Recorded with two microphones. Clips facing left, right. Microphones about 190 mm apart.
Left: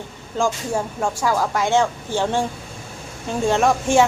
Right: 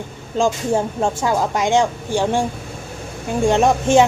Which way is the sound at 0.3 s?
20° right (ahead or behind).